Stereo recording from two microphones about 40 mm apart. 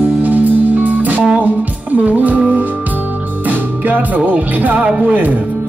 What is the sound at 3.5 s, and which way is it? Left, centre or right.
Music, right.